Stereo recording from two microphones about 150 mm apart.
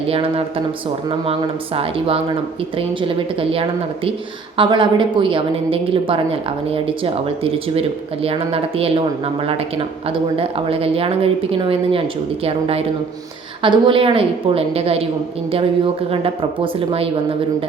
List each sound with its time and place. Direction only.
0.1 s a woman's voice: 40° right (ahead or behind)